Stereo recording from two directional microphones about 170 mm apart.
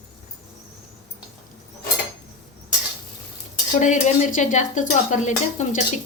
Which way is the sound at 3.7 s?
45° left (ahead or behind).